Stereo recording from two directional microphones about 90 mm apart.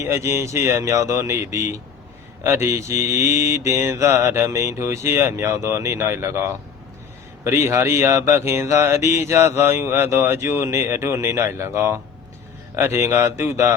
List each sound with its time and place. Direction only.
0.0 s mantra: 30° right (ahead or behind)
7.4 s speech: 30° right (ahead or behind)